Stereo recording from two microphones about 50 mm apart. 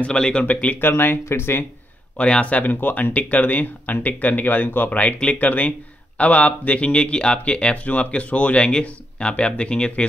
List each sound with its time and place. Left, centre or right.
0.0 s speech: left
0.5 s speech: left
0.7 s speech: left
2.1 s speech: left